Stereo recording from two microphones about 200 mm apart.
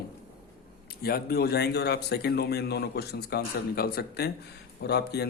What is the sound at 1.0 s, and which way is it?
Speech, 50° left (ahead or behind).